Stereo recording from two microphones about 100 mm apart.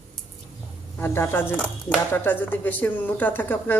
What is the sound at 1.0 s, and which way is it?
Speech, 25° left (ahead or behind).